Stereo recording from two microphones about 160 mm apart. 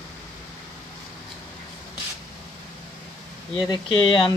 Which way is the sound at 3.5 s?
30° left (ahead or behind).